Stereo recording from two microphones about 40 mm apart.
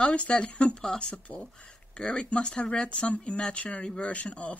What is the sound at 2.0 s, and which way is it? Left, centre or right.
Speech, left.